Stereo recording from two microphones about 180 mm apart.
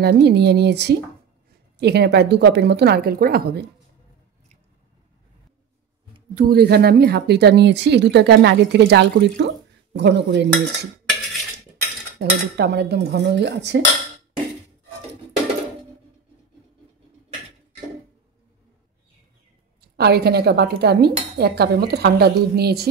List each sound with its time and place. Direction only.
0.0 s speech: 65° right (ahead or behind)
6.3 s speech: 60° right (ahead or behind)
12.2 s speech: 65° right (ahead or behind)
20.0 s cutlery: 65° right (ahead or behind)